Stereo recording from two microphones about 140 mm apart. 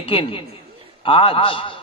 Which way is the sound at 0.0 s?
40° left (ahead or behind).